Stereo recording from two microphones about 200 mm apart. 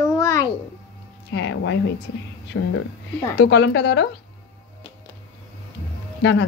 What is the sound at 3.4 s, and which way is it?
Speech, 55° left (ahead or behind).